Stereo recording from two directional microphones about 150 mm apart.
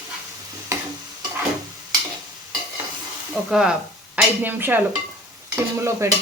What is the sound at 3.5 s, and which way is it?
Stir, 5° right (ahead or behind).